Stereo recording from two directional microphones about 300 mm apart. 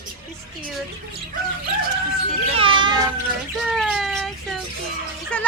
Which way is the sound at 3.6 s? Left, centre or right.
Centre.